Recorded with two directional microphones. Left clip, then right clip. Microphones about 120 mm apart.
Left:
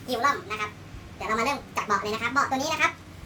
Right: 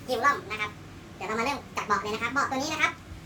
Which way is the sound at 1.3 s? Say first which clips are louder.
Left 3 dB; 60° left (ahead or behind).